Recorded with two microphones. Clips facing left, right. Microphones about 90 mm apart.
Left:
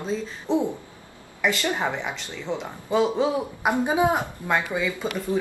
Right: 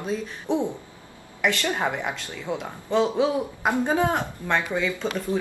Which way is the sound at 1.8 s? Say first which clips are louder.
Right 1 dB; 10° right (ahead or behind).